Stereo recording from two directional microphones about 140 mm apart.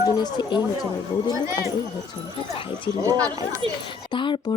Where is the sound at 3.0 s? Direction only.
25° right (ahead or behind).